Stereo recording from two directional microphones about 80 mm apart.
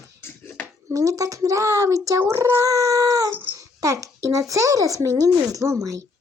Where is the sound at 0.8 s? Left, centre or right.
Right.